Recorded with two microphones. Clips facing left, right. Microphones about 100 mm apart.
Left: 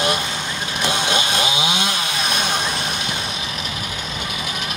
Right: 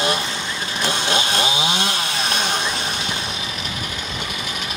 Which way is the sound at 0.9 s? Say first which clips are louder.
Left 1 dB; 5° left (ahead or behind).